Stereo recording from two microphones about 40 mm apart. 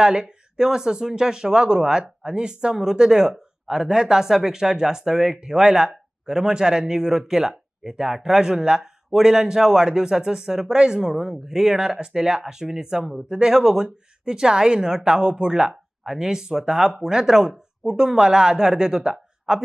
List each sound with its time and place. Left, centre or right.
0.0 s a woman's voice: right